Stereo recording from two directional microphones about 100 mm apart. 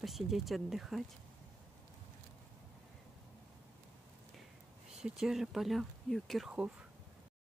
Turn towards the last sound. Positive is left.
turn(degrees=0)  # may be behind; listen again after turning